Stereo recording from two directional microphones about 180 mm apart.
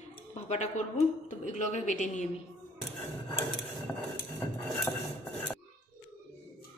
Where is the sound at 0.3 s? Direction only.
40° left (ahead or behind).